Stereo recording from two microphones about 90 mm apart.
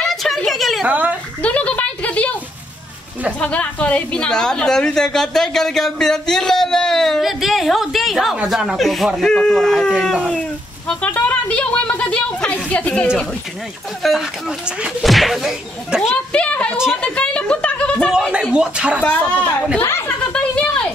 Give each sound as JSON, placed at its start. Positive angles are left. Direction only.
{"t": 0.0, "sound": "a sound", "side_deg": 0}
{"t": 0.8, "sound": "speech", "side_deg": -15}
{"t": 1.4, "sound": "a woman's voice", "side_deg": 15}
{"t": 3.3, "sound": "a woman's voice", "side_deg": 15}
{"t": 10.9, "sound": "speech", "side_deg": 15}
{"t": 14.0, "sound": "a woman's voice", "side_deg": 0}
{"t": 16.3, "sound": "speech", "side_deg": 15}
{"t": 16.7, "sound": "speech", "side_deg": -5}
{"t": 17.0, "sound": "a sound", "side_deg": 10}
{"t": 18.1, "sound": "speech", "side_deg": -5}
{"t": 19.0, "sound": "speech", "side_deg": 15}
{"t": 20.3, "sound": "a sound", "side_deg": 10}